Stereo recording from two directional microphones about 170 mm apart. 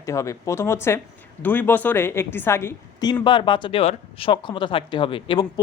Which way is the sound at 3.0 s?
25° left (ahead or behind).